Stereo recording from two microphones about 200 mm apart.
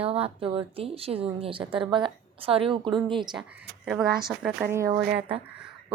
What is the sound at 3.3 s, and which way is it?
A woman's voice, centre (ahead or behind).